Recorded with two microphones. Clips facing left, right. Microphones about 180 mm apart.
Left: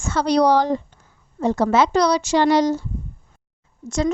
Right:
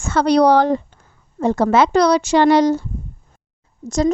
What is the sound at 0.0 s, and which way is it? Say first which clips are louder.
A woman's voice: right 4 dB; 60° right (ahead or behind).